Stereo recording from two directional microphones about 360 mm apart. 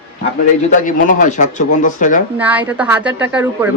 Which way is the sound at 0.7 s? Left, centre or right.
Left.